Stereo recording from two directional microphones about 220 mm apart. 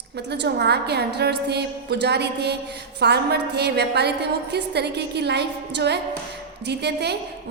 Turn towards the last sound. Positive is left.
turn(degrees=-50)  # may be behind; listen again after turning